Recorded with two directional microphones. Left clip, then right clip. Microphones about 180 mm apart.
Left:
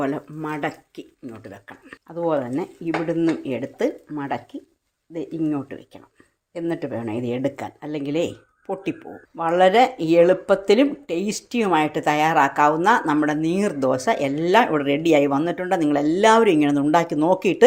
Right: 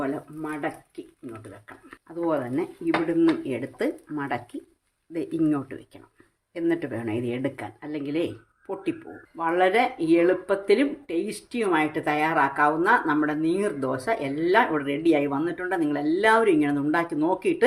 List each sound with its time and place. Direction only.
0.0 s speech: 40° left (ahead or behind)
2.2 s a woman's voice: 20° left (ahead or behind)